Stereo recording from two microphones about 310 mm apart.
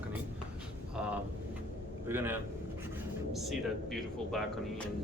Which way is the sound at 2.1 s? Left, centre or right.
Centre.